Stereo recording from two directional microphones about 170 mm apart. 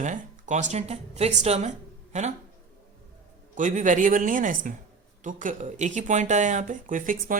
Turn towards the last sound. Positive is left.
turn(degrees=-50)  # may be behind; listen again after turning